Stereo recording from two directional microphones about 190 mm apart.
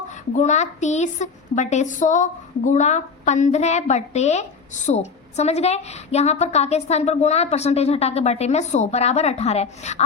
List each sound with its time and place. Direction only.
0.3 s speech: 40° left (ahead or behind)